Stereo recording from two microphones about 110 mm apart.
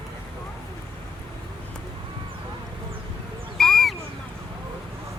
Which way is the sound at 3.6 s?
Centre (ahead or behind).